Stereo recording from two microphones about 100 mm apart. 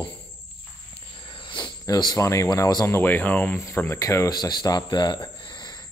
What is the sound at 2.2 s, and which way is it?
Speech, 30° left (ahead or behind).